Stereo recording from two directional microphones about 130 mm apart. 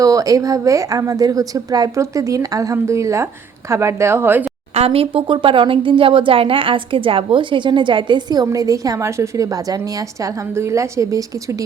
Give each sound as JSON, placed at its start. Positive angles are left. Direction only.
{"t": 0.0, "sound": "speech", "side_deg": -25}
{"t": 4.7, "sound": "speech", "side_deg": -50}